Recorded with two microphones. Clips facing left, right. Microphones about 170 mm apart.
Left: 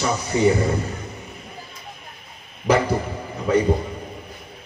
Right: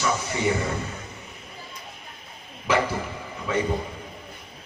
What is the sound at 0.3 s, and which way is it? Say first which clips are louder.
Speech: left 10 dB; 35° left (ahead or behind).